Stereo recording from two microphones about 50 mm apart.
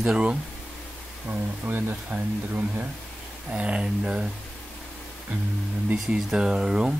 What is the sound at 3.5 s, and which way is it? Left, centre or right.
Speech, right.